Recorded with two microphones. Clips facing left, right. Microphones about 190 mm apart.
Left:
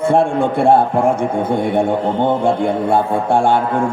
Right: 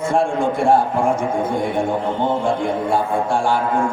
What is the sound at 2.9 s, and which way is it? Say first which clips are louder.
Speech: left 3 dB; 60° left (ahead or behind).